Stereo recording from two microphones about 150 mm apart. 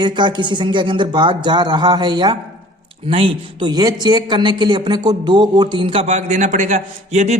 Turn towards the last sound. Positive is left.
turn(degrees=-50)  # may be behind; listen again after turning